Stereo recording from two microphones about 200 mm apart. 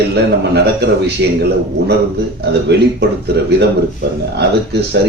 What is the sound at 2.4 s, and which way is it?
A man's voice, 55° right (ahead or behind).